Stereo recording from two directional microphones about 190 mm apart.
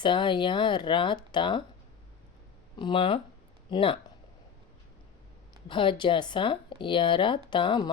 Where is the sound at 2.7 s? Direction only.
25° left (ahead or behind).